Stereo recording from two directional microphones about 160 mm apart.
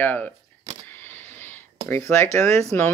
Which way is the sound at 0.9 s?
15° left (ahead or behind).